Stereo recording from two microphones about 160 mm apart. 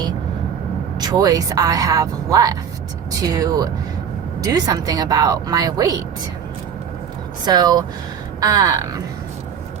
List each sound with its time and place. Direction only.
0.9 s speech: 25° right (ahead or behind)
7.4 s speech: 25° right (ahead or behind)